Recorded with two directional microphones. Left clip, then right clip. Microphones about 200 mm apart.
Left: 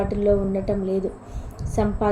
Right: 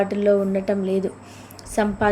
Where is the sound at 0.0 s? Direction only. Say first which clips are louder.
Right 2 dB; 15° right (ahead or behind).